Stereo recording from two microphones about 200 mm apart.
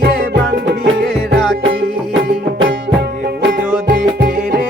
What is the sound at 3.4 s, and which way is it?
Music, 50° right (ahead or behind).